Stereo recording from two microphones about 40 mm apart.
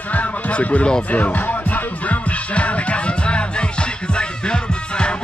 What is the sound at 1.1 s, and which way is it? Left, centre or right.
Music, left.